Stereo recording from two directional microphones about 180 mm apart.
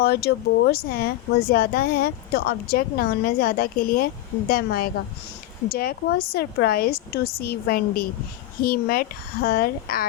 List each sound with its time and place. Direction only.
0.0 s speech: 60° left (ahead or behind)